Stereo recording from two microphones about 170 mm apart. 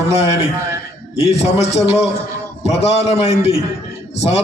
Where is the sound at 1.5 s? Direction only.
40° left (ahead or behind).